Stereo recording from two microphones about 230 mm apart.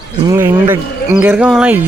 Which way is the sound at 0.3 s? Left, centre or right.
Centre.